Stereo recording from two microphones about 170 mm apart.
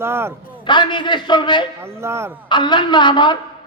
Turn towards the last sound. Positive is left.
turn(degrees=25)  # may be behind; listen again after turning